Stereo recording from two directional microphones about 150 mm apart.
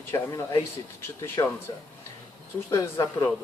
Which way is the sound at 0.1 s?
20° left (ahead or behind).